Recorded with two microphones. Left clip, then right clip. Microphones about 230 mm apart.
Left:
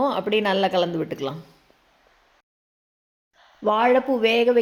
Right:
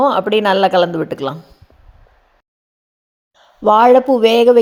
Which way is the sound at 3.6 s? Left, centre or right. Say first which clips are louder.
Right 10 dB; right.